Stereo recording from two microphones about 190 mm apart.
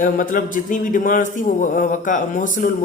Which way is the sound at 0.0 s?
45° left (ahead or behind).